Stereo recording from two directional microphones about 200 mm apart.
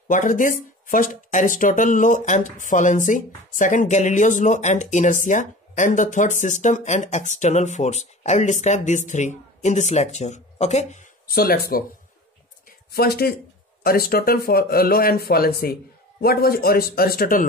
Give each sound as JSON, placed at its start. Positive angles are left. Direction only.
{"t": 0.1, "sound": "speech", "side_deg": 40}
{"t": 11.2, "sound": "speech", "side_deg": 50}
{"t": 12.9, "sound": "speech", "side_deg": 50}